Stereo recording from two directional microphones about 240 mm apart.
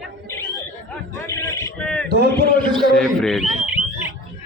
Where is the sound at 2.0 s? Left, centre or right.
Right.